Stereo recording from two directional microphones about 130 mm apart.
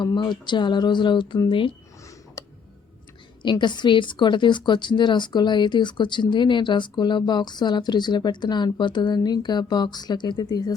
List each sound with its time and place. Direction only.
0.0 s a woman's voice: 35° left (ahead or behind)
2.4 s tick: 25° left (ahead or behind)
3.4 s a woman's voice: 35° left (ahead or behind)